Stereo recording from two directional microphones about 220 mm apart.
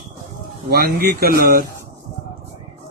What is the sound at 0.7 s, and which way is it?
Speech, 45° right (ahead or behind).